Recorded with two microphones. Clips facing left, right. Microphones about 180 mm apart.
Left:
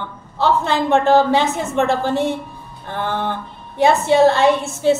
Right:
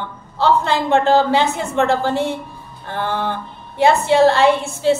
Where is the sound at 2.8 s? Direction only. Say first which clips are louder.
Even; 15° left (ahead or behind).